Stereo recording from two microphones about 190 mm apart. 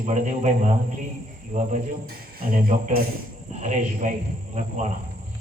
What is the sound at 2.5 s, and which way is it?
Speech, 50° right (ahead or behind).